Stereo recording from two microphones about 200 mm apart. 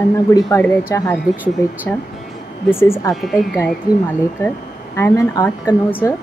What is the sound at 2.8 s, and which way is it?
Speech, 15° left (ahead or behind).